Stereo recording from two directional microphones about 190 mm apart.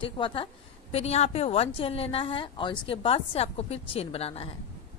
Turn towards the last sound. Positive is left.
turn(degrees=30)  # may be behind; listen again after turning